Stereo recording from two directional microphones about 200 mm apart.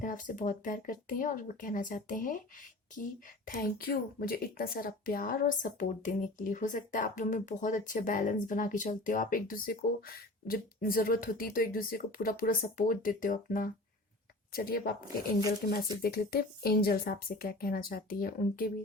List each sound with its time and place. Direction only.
0.0 s speech: 40° left (ahead or behind)